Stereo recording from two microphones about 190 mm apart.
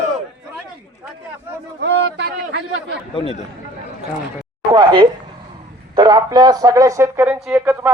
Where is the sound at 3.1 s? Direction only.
30° left (ahead or behind).